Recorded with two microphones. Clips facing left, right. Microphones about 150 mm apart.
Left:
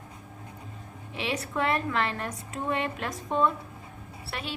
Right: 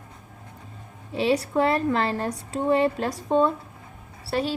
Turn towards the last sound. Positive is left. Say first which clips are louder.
# right 10 dB
turn(degrees=-35)  # may be behind; listen again after turning